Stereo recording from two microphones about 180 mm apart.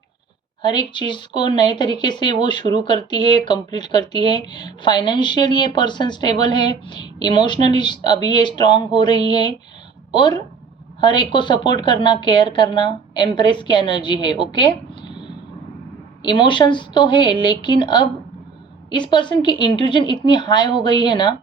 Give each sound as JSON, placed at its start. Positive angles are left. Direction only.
{"t": 0.6, "sound": "speech", "side_deg": 25}